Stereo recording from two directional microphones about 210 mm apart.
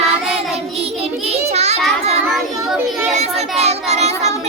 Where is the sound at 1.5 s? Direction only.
30° right (ahead or behind).